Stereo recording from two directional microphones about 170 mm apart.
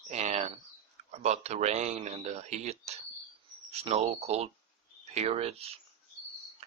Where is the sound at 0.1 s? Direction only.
40° right (ahead or behind).